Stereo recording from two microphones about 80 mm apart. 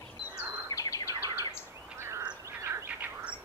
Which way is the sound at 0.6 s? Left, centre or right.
Left.